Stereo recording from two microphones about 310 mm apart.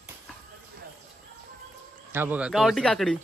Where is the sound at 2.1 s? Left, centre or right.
Centre.